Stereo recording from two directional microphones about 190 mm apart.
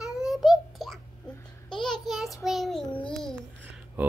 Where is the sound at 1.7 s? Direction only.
Centre (ahead or behind).